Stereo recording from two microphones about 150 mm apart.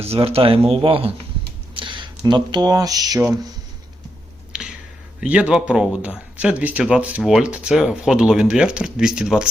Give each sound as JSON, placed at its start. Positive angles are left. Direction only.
{"t": 0.0, "sound": "speech", "side_deg": -40}
{"t": 1.7, "sound": "a sound", "side_deg": -30}
{"t": 2.2, "sound": "speech", "side_deg": -30}
{"t": 4.5, "sound": "whispering", "side_deg": -5}
{"t": 5.2, "sound": "speech", "side_deg": -5}